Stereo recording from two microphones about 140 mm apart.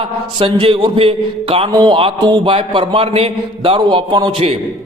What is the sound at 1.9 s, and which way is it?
A man's voice, 35° right (ahead or behind).